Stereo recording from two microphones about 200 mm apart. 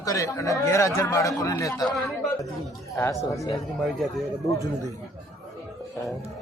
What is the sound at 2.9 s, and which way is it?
Speech, 15° left (ahead or behind).